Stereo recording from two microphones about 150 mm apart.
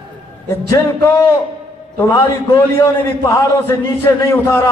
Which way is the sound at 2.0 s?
20° left (ahead or behind).